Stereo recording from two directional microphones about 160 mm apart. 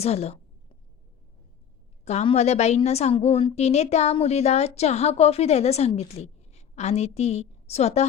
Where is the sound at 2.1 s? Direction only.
45° left (ahead or behind).